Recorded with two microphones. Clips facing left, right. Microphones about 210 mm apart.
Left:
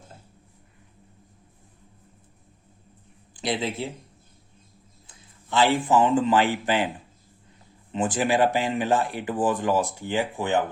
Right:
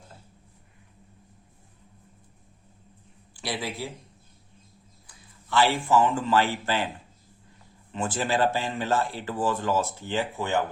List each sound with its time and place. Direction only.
3.3 s a man's voice: 20° left (ahead or behind)
5.0 s speech: 20° left (ahead or behind)
7.9 s speech: 15° left (ahead or behind)